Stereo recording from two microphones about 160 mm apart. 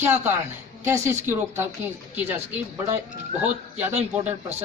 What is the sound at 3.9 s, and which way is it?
Speech, 45° right (ahead or behind).